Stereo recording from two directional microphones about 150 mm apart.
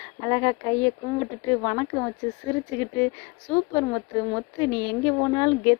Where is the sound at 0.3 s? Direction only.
30° left (ahead or behind).